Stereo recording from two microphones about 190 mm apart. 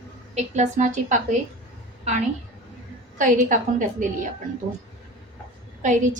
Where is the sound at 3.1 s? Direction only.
45° right (ahead or behind).